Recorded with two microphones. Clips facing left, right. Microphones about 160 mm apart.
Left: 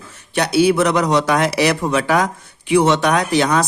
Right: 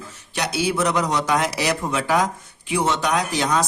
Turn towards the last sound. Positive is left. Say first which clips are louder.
# left 5 dB
turn(degrees=70)  # may be behind; listen again after turning